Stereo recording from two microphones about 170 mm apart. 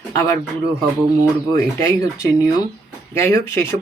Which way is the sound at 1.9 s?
20° left (ahead or behind).